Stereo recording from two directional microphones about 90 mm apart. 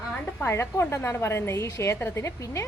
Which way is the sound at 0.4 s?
30° left (ahead or behind).